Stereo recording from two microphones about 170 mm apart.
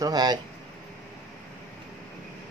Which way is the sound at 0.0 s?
25° right (ahead or behind).